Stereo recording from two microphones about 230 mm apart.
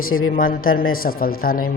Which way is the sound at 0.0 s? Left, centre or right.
Left.